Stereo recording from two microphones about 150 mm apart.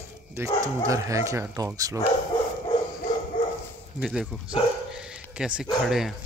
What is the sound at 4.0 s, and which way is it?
Speech, 5° right (ahead or behind).